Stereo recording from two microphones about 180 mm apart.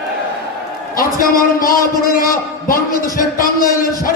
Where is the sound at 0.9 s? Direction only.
50° left (ahead or behind).